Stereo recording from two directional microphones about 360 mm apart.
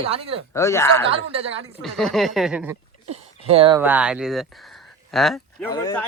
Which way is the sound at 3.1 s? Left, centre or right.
Centre.